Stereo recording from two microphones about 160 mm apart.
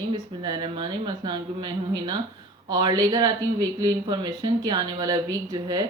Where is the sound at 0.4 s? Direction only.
25° right (ahead or behind).